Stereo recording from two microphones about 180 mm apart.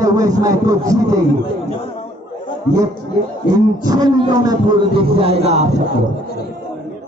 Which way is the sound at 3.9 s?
20° right (ahead or behind).